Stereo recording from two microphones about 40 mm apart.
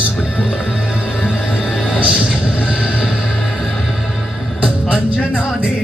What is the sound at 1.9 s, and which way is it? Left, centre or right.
Music, right.